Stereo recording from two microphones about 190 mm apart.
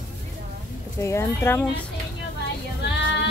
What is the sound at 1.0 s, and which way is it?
Speech, 15° left (ahead or behind).